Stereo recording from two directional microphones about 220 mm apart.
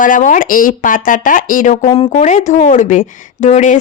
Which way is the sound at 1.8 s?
25° left (ahead or behind).